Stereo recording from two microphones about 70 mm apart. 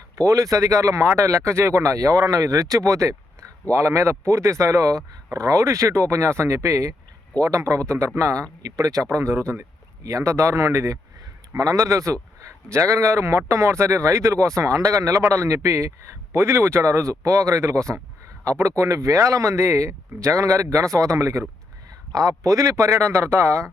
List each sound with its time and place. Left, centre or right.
0.2 s speech: right
9.0 s speech: right
10.0 s speech: right
11.5 s speech: right
22.1 s speech: right